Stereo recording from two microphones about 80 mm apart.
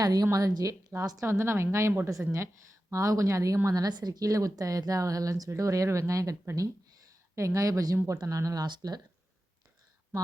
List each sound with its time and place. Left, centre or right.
0.0 s a woman's voice: right
2.9 s a woman's voice: right
3.8 s a woman's voice: right